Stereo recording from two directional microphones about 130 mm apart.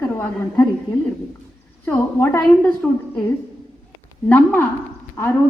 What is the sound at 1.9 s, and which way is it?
Speech, 20° left (ahead or behind).